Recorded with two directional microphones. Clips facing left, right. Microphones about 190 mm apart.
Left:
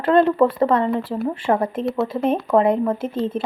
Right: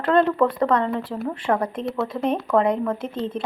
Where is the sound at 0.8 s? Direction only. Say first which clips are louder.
Left 3 dB; 10° left (ahead or behind).